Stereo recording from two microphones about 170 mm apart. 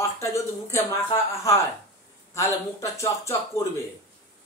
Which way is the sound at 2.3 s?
15° left (ahead or behind).